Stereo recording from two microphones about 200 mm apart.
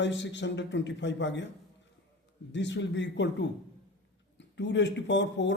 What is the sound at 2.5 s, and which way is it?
Speech, 65° left (ahead or behind).